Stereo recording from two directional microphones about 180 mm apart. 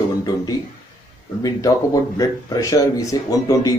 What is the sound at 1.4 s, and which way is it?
A man's voice, 20° left (ahead or behind).